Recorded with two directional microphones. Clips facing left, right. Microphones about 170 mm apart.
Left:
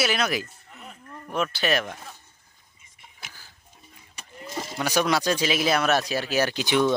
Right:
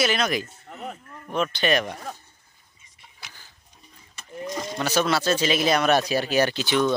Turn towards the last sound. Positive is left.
turn(degrees=15)  # may be behind; listen again after turning